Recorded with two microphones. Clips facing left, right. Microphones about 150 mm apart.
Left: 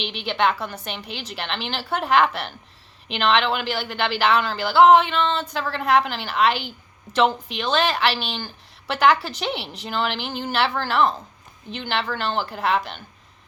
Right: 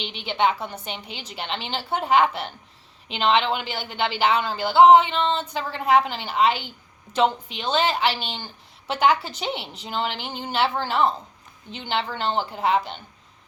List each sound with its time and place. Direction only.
0.0 s speech: 75° left (ahead or behind)